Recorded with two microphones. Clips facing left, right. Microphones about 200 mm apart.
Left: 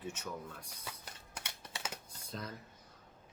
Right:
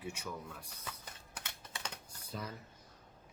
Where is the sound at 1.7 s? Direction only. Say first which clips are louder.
Left 2 dB; 10° left (ahead or behind).